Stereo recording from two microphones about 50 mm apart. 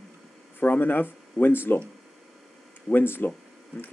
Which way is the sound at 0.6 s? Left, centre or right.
Left.